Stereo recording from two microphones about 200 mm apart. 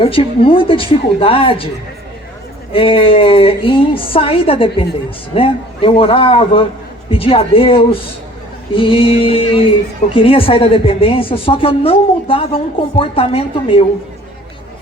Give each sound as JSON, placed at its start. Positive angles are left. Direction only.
{"t": 0.0, "sound": "a woman's voice", "side_deg": 25}
{"t": 2.7, "sound": "a woman's voice", "side_deg": 25}